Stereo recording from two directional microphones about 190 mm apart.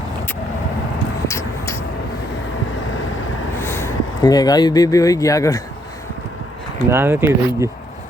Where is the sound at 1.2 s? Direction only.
15° left (ahead or behind).